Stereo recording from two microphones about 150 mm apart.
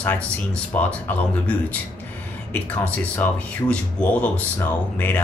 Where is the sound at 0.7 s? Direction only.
10° left (ahead or behind).